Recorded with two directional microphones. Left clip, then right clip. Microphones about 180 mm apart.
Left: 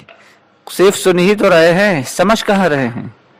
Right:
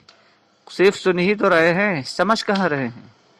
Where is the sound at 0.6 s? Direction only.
35° left (ahead or behind).